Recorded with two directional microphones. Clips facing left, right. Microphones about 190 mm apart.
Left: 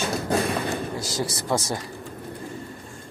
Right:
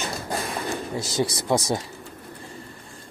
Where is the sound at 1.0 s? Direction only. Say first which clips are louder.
Right 3 dB; 20° right (ahead or behind).